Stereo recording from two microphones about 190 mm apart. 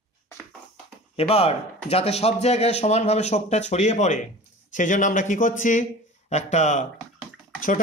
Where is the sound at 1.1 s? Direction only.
30° left (ahead or behind).